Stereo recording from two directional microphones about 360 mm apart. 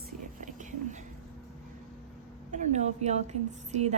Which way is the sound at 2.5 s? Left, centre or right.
Centre.